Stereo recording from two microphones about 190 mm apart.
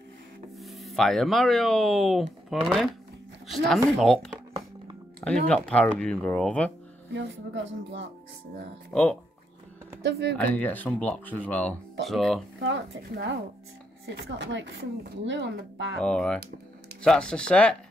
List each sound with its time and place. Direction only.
0.6 s speech: centre (ahead or behind)
5.5 s speech: 5° left (ahead or behind)
7.2 s speech: 75° right (ahead or behind)
8.9 s speech: centre (ahead or behind)
10.0 s speech: 60° right (ahead or behind)
10.3 s speech: 10° left (ahead or behind)
12.5 s speech: 80° right
13.1 s speech: 65° right (ahead or behind)
16.0 s speech: 5° left (ahead or behind)